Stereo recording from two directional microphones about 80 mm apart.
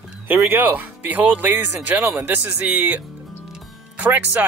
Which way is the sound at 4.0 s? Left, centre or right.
Right.